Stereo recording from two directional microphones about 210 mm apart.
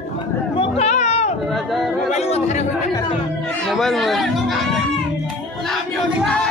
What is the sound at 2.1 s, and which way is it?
Speech, 30° left (ahead or behind).